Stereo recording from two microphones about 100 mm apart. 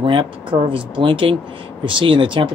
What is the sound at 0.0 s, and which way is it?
Speech, 60° right (ahead or behind).